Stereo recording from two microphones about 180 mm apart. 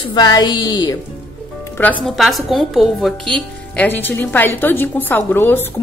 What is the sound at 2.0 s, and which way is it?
A woman's voice, centre (ahead or behind).